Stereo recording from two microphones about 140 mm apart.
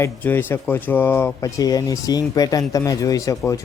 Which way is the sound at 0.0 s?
15° left (ahead or behind).